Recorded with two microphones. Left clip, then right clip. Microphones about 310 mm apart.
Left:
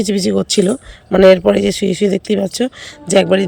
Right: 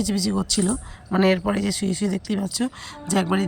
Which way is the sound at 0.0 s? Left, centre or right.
Centre.